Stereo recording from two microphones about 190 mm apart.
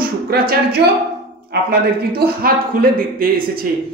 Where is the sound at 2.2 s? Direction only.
50° right (ahead or behind).